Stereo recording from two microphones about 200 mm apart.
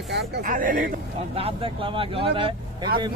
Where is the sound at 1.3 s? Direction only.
30° right (ahead or behind).